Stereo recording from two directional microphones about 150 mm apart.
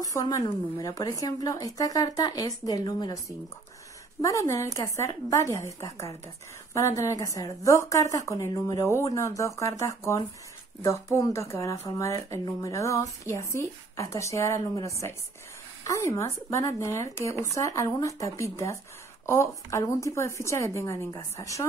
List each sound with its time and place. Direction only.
0.0 s speech: 25° left (ahead or behind)